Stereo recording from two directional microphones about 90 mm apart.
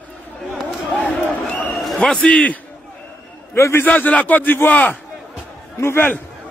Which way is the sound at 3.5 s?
25° left (ahead or behind).